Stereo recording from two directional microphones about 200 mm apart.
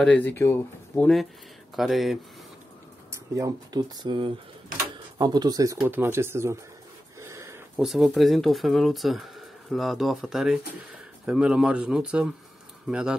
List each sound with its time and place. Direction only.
0.0 s speech: 5° left (ahead or behind)
3.1 s speech: 15° right (ahead or behind)